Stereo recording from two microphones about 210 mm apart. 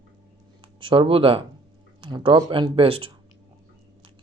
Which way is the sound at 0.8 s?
25° right (ahead or behind).